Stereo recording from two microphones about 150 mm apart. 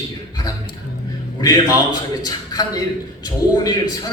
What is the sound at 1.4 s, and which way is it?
A man's voice, 25° left (ahead or behind).